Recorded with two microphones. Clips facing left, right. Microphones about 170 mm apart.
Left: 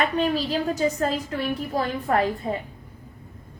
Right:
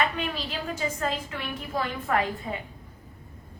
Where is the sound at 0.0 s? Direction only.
40° left (ahead or behind).